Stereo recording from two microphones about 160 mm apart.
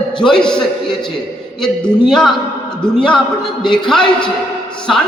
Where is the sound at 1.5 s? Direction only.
5° left (ahead or behind).